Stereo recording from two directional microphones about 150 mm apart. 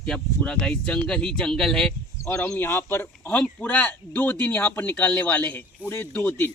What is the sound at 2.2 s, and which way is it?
Speech, 20° left (ahead or behind).